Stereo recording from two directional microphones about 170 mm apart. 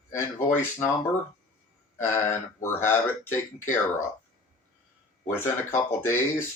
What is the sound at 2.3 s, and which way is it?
Speech, 15° left (ahead or behind).